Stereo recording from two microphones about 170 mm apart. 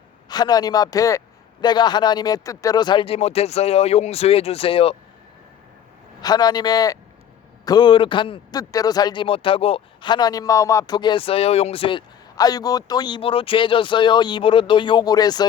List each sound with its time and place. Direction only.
0.3 s a man's voice: 25° left (ahead or behind)
6.2 s a man's voice: 25° left (ahead or behind)